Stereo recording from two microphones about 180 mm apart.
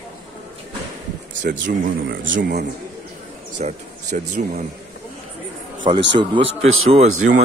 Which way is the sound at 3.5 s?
45° right (ahead or behind).